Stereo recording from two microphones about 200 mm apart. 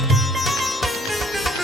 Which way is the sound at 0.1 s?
Centre (ahead or behind).